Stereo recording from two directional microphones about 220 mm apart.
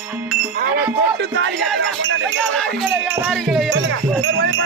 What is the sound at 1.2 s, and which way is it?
Music, 50° right (ahead or behind).